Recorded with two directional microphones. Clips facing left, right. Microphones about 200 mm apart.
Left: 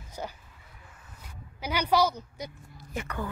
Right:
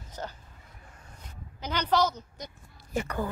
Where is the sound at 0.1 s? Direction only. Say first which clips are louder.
Left 1 dB; 10° left (ahead or behind).